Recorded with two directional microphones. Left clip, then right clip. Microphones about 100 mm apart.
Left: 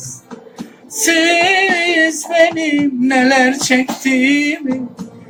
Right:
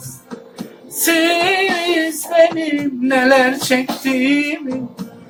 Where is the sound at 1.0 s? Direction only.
Centre (ahead or behind).